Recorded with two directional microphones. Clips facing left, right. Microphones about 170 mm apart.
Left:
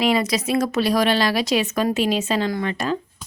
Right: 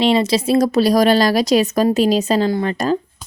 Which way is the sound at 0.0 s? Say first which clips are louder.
Right 5 dB; 30° right (ahead or behind).